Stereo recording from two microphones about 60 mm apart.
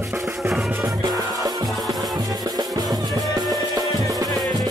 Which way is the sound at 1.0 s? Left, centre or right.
Right.